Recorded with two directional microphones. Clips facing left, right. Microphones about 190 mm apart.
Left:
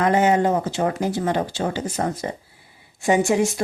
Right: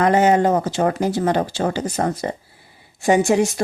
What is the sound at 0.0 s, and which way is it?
Speech, 40° right (ahead or behind).